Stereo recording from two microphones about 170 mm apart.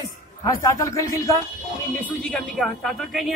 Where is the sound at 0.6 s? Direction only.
20° left (ahead or behind).